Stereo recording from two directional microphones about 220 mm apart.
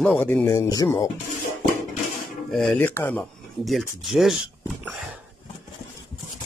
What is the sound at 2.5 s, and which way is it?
Speech, centre (ahead or behind).